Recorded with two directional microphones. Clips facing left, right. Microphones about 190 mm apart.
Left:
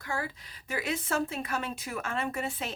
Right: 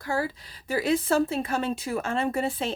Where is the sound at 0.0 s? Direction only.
35° right (ahead or behind).